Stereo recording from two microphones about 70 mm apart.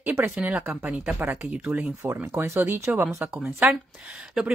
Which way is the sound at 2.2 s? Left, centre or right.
Right.